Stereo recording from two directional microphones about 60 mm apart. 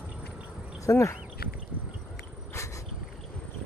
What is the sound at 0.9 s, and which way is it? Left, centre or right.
Speech, left.